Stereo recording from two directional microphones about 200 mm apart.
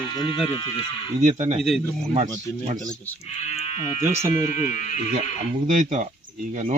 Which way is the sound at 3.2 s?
30° left (ahead or behind).